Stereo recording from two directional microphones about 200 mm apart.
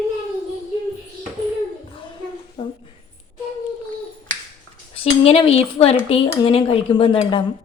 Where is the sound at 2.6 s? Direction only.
25° left (ahead or behind).